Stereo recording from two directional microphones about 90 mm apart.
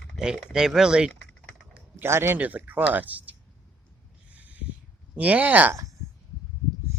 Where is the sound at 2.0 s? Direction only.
30° right (ahead or behind).